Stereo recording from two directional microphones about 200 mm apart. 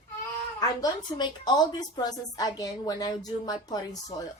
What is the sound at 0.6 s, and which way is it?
A woman's voice, 20° left (ahead or behind).